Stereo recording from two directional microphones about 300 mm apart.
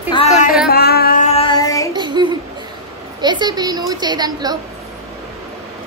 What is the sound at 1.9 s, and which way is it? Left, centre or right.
Child singing, centre.